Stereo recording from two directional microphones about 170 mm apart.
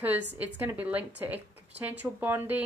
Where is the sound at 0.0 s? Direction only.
10° right (ahead or behind).